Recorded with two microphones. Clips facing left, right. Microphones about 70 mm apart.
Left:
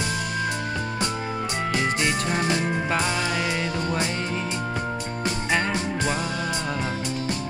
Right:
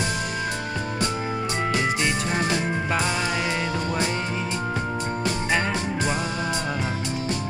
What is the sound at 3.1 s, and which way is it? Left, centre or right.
Music, centre.